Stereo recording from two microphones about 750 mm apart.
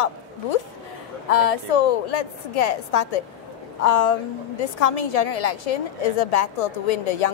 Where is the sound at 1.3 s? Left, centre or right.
Left.